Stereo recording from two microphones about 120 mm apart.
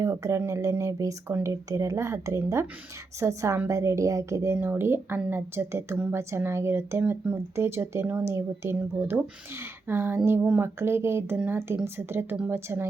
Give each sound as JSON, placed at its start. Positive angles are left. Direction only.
{"t": 0.0, "sound": "a woman's voice", "side_deg": -25}